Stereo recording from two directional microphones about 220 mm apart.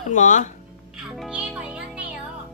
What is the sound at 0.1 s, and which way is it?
Speech, 35° left (ahead or behind).